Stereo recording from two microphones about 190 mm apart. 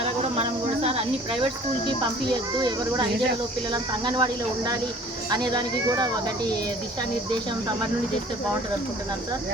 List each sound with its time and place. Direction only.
2.3 s speech: 20° right (ahead or behind)